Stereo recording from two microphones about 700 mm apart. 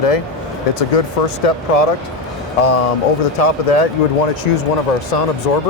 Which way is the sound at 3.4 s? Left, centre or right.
Left.